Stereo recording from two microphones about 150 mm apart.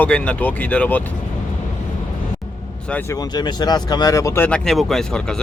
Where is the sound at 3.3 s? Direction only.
30° left (ahead or behind).